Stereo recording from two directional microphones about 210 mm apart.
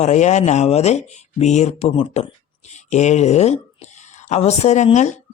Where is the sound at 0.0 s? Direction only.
35° left (ahead or behind).